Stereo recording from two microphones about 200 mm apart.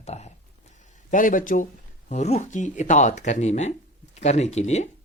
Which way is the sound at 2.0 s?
35° left (ahead or behind).